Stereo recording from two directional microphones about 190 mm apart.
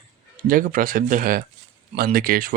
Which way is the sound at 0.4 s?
45° right (ahead or behind).